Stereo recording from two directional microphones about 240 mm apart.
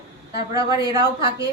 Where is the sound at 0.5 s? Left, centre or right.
Centre.